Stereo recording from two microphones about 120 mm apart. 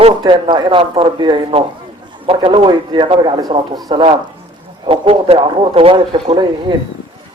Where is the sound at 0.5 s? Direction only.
40° right (ahead or behind).